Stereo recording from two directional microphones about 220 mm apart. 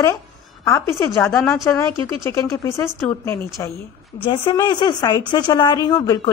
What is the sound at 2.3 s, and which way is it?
Speech, 15° left (ahead or behind).